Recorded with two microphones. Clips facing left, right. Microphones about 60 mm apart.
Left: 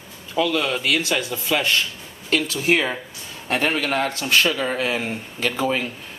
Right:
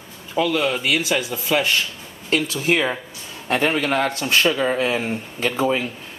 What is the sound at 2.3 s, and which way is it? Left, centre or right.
Speech, right.